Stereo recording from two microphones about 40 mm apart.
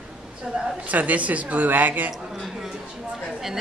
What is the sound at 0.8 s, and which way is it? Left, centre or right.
A woman's voice, right.